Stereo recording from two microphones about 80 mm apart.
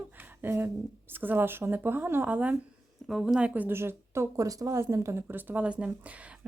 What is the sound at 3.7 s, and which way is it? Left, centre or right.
Speech, right.